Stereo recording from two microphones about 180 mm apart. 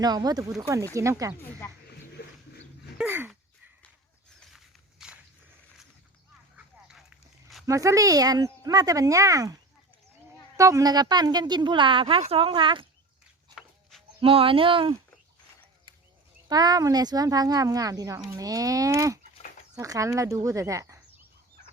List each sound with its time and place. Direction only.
0.0 s speech: 20° right (ahead or behind)
3.0 s dog: 10° right (ahead or behind)
4.4 s walk: centre (ahead or behind)
6.8 s walk: 5° right (ahead or behind)
7.7 s speech: 20° right (ahead or behind)
10.6 s speech: 20° right (ahead or behind)
14.2 s speech: 30° right (ahead or behind)
16.5 s speech: 20° right (ahead or behind)